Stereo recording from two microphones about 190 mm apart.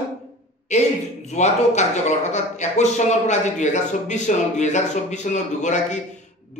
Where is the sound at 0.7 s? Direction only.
35° left (ahead or behind).